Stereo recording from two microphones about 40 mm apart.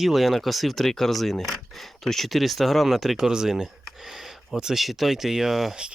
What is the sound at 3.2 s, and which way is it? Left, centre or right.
Speech, centre.